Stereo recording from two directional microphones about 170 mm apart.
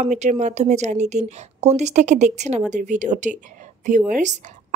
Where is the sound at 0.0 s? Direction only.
45° right (ahead or behind).